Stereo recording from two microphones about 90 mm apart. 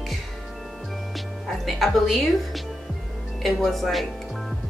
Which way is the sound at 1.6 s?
Centre (ahead or behind).